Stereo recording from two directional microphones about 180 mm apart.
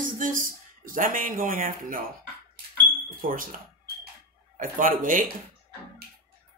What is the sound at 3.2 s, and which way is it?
Speech, 50° right (ahead or behind).